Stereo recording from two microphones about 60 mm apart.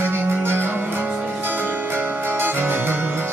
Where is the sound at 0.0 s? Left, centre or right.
Right.